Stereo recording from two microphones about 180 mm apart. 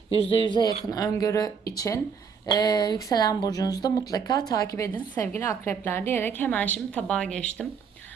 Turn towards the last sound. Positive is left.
turn(degrees=5)  # may be behind; listen again after turning